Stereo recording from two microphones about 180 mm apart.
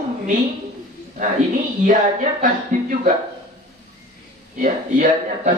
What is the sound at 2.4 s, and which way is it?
Speech, 45° right (ahead or behind).